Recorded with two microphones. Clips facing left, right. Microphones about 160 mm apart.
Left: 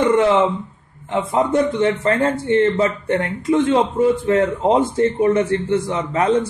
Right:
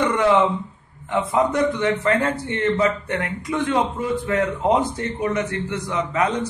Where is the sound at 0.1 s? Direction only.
25° left (ahead or behind).